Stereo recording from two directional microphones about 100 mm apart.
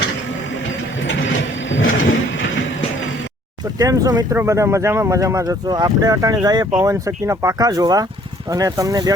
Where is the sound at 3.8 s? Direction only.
35° right (ahead or behind).